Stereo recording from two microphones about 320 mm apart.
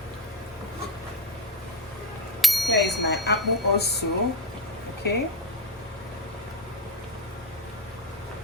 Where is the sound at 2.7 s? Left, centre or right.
Left.